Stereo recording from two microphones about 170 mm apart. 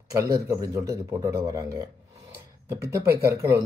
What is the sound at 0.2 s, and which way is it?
Speech, 15° right (ahead or behind).